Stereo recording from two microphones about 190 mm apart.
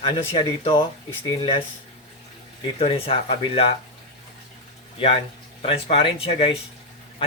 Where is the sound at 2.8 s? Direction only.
30° left (ahead or behind).